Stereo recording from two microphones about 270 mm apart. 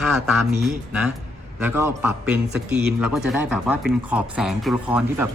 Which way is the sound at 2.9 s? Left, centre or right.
Centre.